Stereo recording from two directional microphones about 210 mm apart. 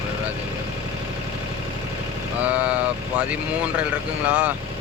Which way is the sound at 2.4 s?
5° right (ahead or behind).